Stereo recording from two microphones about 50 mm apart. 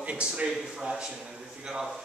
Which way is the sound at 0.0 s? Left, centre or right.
Right.